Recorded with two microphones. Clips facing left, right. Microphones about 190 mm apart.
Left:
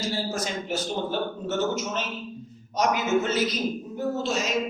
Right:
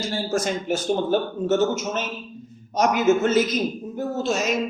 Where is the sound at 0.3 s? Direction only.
50° right (ahead or behind).